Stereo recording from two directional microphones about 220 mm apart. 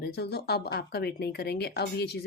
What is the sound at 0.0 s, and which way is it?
Speech, 50° left (ahead or behind).